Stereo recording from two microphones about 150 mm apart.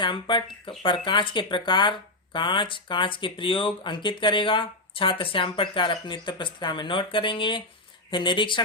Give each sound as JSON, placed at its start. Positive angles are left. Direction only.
{"t": 0.0, "sound": "speech", "side_deg": 30}